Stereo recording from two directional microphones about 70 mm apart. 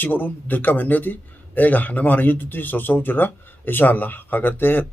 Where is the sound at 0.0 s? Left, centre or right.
Left.